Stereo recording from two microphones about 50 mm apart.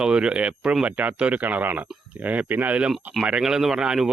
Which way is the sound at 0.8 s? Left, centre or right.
Right.